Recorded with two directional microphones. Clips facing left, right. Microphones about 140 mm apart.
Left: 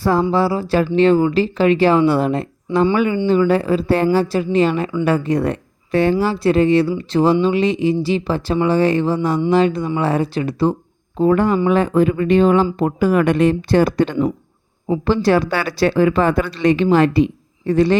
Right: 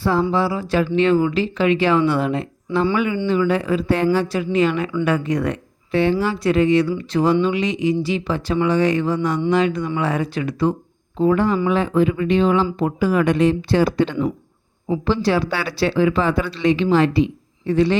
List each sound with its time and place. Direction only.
0.0 s speech: 40° left (ahead or behind)
11.2 s speech: 45° left (ahead or behind)